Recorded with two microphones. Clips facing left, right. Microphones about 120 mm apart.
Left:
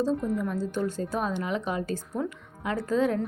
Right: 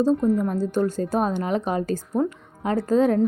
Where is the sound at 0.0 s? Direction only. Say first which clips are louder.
Right 7 dB; 35° right (ahead or behind).